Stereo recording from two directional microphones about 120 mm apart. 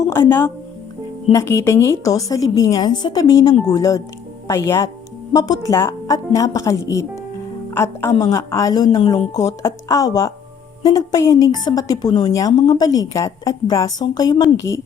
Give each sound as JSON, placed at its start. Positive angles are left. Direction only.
{"t": 0.1, "sound": "a woman's voice", "side_deg": 20}